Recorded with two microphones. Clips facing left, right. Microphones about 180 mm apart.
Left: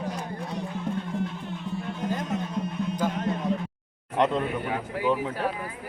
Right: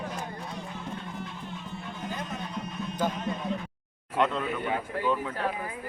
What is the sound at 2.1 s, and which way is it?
Music, 45° left (ahead or behind).